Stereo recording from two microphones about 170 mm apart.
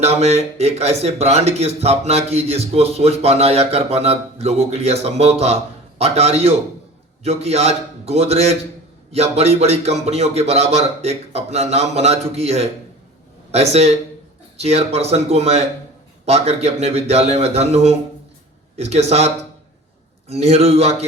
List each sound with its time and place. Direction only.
0.0 s speech: 40° right (ahead or behind)